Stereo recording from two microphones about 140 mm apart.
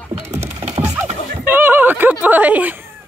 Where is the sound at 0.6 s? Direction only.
55° right (ahead or behind).